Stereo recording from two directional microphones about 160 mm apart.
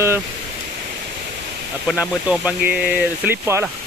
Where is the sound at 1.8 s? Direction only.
5° right (ahead or behind).